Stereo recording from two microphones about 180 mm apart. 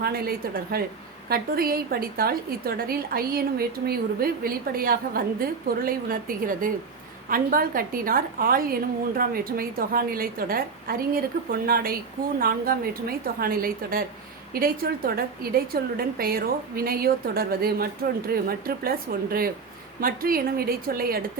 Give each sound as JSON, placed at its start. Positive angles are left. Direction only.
{"t": 0.0, "sound": "a woman's voice", "side_deg": -55}